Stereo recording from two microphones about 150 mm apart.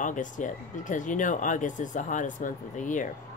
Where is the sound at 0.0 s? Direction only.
60° left (ahead or behind).